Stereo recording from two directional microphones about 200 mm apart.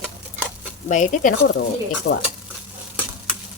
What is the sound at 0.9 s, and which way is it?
Speech, 35° left (ahead or behind).